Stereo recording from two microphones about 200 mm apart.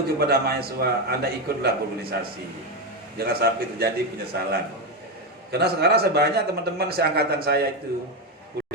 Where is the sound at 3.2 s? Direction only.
50° right (ahead or behind).